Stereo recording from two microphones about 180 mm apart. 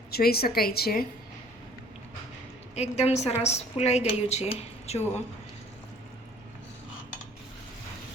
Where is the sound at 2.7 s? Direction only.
35° left (ahead or behind).